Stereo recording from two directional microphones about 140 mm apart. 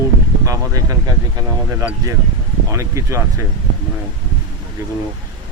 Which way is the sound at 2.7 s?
20° right (ahead or behind).